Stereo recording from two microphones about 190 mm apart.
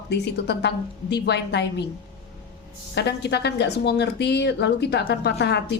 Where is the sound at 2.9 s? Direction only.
60° left (ahead or behind).